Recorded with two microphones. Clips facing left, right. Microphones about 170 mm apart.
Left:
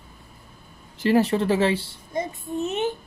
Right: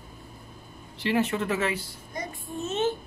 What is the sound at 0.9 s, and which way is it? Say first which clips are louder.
A child's voice: left 6 dB; 40° left (ahead or behind).